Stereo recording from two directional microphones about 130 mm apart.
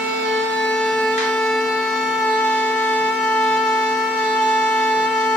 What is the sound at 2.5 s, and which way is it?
Shofar, 10° left (ahead or behind).